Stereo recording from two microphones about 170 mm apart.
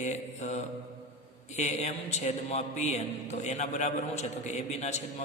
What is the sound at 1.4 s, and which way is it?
A man's voice, 40° left (ahead or behind).